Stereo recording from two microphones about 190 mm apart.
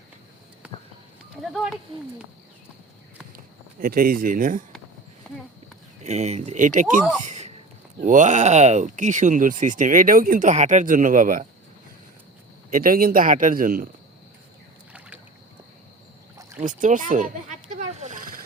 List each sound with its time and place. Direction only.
1.4 s speech: centre (ahead or behind)
3.3 s speech: 50° right (ahead or behind)
6.0 s speech: 35° right (ahead or behind)
7.2 s a sound: 40° right (ahead or behind)
8.0 s speech: 40° right (ahead or behind)
12.7 s speech: 50° right (ahead or behind)
14.9 s boat: 5° right (ahead or behind)
16.6 s a sound: 40° right (ahead or behind)